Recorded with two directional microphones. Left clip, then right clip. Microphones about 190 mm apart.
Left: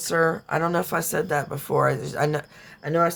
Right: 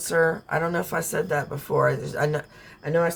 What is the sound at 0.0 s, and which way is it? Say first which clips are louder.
Speech: even; 50° left (ahead or behind).